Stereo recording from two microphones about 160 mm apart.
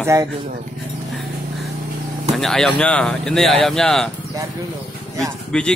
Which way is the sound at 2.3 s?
Centre (ahead or behind).